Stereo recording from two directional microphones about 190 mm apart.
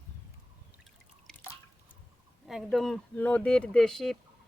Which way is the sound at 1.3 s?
5° left (ahead or behind).